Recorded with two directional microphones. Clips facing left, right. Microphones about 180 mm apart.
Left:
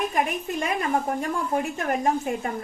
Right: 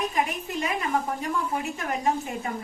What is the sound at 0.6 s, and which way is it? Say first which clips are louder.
A woman's voice: left 1 dB; 50° left (ahead or behind).